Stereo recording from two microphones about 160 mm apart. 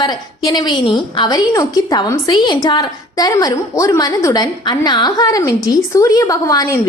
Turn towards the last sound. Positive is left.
turn(degrees=20)  # may be behind; listen again after turning